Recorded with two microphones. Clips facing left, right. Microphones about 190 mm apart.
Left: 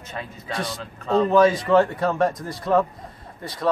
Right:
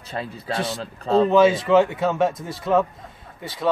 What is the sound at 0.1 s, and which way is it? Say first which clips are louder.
Speech: right 4 dB; 30° right (ahead or behind).